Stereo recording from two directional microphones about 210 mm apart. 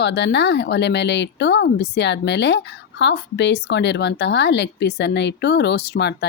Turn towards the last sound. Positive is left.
turn(degrees=50)  # may be behind; listen again after turning